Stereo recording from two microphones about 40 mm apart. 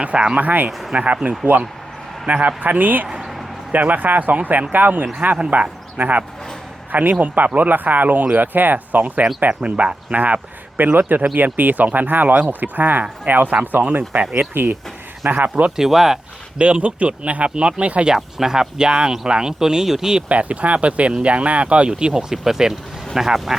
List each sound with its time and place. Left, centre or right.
0.0 s speech: right
0.3 s speech: right
0.9 s speech: right
1.5 s speech: right
2.2 s speech: right
6.0 s speech: right
9.5 s speech: right
10.8 s speech: right
14.3 s speech: right
15.7 s speech: centre
16.6 s speech: right
18.0 s speech: centre
20.2 s speech: right; by 23.6 s centre